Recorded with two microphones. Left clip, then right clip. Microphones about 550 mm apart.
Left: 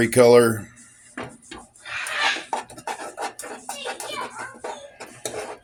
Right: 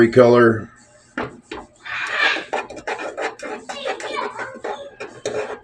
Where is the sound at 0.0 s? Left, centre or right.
Left.